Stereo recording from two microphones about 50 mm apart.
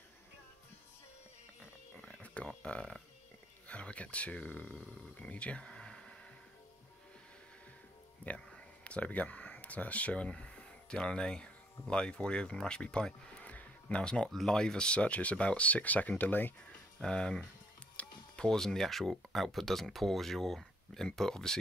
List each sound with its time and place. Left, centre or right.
2.4 s speech: left
5.3 s a sound: left
8.3 s speech: left
13.4 s a sound: left
14.3 s speech: centre; by 16.5 s left
17.0 s speech: centre
18.0 s music: left
18.4 s speech: centre